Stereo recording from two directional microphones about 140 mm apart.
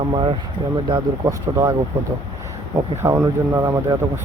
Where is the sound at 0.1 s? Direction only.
35° right (ahead or behind).